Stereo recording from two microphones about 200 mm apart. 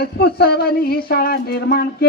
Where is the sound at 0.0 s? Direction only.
50° left (ahead or behind).